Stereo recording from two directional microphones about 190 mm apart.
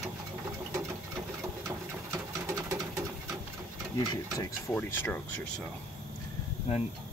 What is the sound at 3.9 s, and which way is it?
Speech, 20° left (ahead or behind).